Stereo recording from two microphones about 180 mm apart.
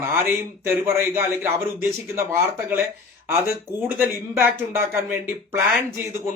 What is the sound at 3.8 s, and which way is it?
Speech, 10° right (ahead or behind).